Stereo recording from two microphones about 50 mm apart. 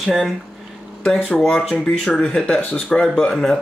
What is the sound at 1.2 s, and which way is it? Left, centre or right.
Speech, centre.